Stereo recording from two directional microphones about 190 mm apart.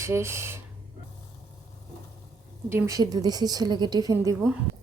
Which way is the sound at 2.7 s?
20° right (ahead or behind).